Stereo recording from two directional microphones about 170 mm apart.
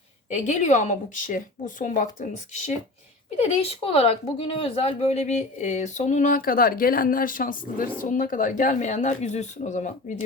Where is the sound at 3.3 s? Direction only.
35° left (ahead or behind).